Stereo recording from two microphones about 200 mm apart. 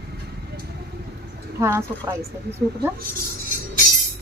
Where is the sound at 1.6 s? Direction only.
15° right (ahead or behind).